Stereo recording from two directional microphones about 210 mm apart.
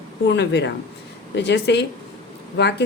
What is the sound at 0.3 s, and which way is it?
A woman's voice, 55° left (ahead or behind).